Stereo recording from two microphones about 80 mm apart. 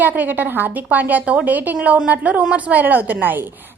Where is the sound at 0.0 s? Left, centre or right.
Right.